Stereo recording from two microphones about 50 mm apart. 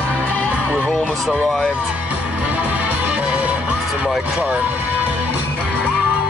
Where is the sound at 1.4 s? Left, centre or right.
Centre.